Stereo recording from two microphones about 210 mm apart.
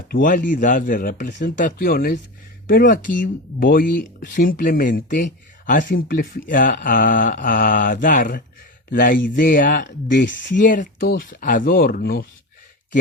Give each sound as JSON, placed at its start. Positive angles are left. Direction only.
{"t": 0.1, "sound": "speech", "side_deg": 40}